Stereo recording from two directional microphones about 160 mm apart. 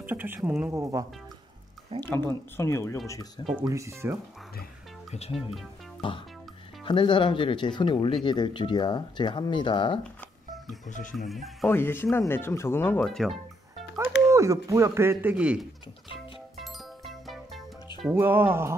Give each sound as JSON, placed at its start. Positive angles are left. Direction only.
{"t": 0.0, "sound": "speech", "side_deg": -10}
{"t": 2.0, "sound": "speech", "side_deg": 15}
{"t": 3.5, "sound": "speech", "side_deg": -20}
{"t": 5.3, "sound": "speech", "side_deg": 0}
{"t": 5.9, "sound": "music", "side_deg": 30}
{"t": 6.8, "sound": "speech", "side_deg": 30}
{"t": 10.9, "sound": "music", "side_deg": 55}
{"t": 11.2, "sound": "speech", "side_deg": 0}
{"t": 11.7, "sound": "speech", "side_deg": 15}
{"t": 13.0, "sound": "music", "side_deg": 0}
{"t": 14.2, "sound": "speech", "side_deg": -20}
{"t": 16.5, "sound": "music", "side_deg": 0}
{"t": 18.1, "sound": "speech", "side_deg": -15}